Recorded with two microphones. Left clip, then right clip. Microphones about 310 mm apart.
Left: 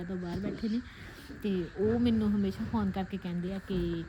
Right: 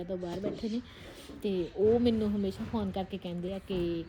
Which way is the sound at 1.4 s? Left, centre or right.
Centre.